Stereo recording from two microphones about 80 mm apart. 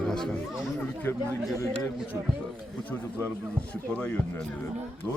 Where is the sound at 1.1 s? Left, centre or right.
Left.